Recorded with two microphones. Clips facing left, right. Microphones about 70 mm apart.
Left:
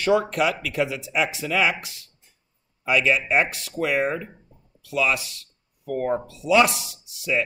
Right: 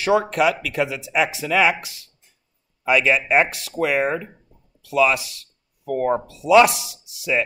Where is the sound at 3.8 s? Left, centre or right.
Right.